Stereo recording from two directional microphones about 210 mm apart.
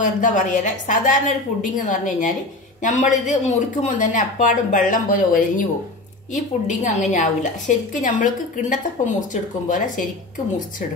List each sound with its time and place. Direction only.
0.0 s a woman's voice: 35° left (ahead or behind)